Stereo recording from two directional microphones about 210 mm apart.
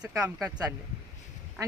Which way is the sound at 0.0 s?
15° right (ahead or behind).